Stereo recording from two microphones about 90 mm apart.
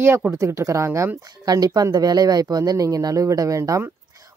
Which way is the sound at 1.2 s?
45° right (ahead or behind).